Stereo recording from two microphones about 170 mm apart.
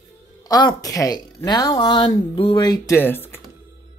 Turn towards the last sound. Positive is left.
turn(degrees=15)  # may be behind; listen again after turning